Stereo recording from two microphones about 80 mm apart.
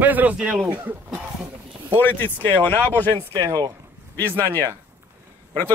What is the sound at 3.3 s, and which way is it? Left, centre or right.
Speech, right.